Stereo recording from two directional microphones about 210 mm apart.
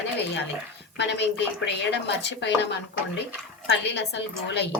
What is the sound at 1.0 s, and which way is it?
Speech, 55° left (ahead or behind).